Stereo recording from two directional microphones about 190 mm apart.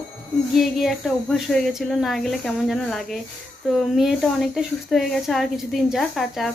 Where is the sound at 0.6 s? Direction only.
Centre (ahead or behind).